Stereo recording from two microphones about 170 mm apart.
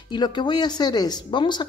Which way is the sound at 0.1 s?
25° left (ahead or behind).